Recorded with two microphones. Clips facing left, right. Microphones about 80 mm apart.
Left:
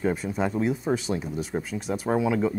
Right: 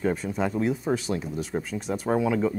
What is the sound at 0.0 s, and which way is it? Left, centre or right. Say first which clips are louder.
Speech: even; centre.